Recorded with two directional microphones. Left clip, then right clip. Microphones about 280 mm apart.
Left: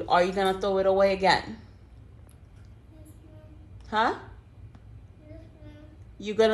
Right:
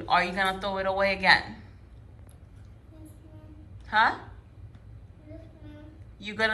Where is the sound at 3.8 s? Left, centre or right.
Left.